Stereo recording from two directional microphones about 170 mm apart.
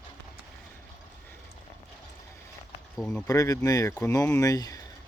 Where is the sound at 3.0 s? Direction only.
5° left (ahead or behind).